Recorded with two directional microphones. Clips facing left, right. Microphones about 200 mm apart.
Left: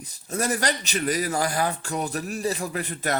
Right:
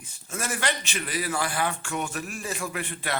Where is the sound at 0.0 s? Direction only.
40° left (ahead or behind).